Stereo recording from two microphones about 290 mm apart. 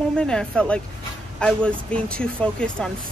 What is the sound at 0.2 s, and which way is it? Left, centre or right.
Speech, centre.